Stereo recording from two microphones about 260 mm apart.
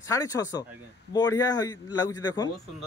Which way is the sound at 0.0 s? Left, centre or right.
Centre.